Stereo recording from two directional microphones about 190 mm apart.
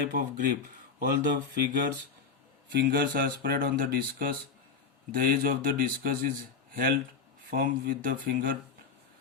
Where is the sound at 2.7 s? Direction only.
50° right (ahead or behind).